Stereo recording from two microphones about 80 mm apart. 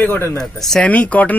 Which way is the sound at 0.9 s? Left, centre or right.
Centre.